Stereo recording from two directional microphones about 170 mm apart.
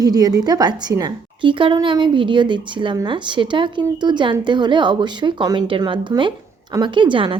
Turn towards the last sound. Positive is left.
turn(degrees=-30)  # may be behind; listen again after turning